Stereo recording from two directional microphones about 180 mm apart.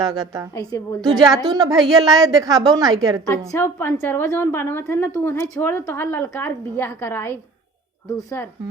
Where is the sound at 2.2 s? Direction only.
20° right (ahead or behind).